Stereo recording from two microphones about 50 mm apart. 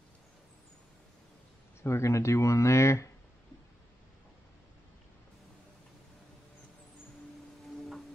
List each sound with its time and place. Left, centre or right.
1.8 s speech: left